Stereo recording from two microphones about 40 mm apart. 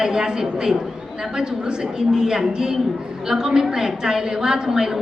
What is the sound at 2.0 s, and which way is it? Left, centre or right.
A woman's voice, centre.